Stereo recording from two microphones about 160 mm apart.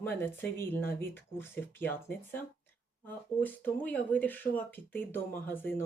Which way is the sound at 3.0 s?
10° left (ahead or behind).